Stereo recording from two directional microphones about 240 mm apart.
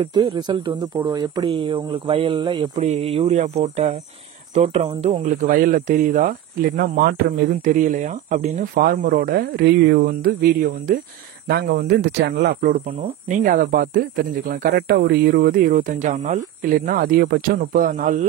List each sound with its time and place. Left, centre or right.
0.0 s speech: centre